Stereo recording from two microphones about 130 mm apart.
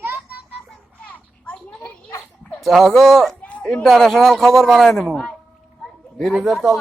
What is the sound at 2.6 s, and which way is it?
Speech, centre (ahead or behind).